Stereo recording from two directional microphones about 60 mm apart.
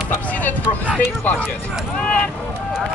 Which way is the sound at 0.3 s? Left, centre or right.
Left.